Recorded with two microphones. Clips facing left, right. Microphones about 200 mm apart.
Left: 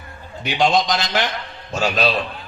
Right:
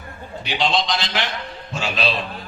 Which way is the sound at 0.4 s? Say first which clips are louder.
Left 4 dB; 45° left (ahead or behind).